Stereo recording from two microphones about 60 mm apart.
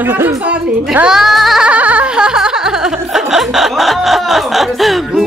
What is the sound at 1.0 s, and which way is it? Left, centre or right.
Music, centre.